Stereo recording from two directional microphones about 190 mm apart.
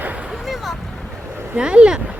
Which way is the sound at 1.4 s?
5° right (ahead or behind).